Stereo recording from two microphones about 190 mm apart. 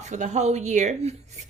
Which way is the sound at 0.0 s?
40° right (ahead or behind).